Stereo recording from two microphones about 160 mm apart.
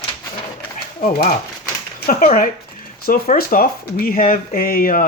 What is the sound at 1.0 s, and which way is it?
Speech, 60° left (ahead or behind).